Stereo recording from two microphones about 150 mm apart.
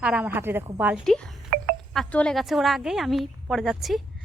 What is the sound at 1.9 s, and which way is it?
A woman's voice, 5° left (ahead or behind).